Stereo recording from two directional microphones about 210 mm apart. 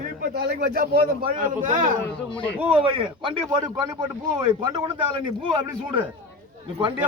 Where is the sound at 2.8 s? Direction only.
25° right (ahead or behind).